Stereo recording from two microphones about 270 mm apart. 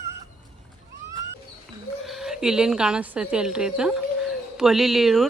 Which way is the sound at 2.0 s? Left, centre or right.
Centre.